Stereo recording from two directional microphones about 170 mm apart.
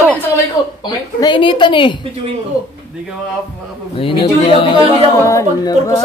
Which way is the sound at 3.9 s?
35° left (ahead or behind).